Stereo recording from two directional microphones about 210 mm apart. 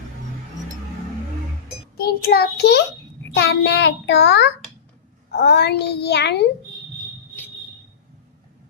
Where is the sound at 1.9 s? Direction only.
50° left (ahead or behind).